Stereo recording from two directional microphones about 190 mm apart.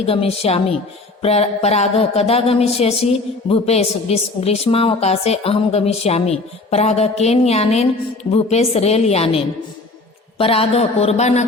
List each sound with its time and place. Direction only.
0.0 s speech: 30° left (ahead or behind)